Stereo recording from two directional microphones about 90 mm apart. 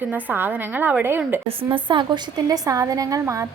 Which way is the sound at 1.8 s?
60° right (ahead or behind).